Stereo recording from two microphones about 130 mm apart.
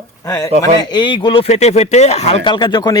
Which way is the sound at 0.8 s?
35° left (ahead or behind).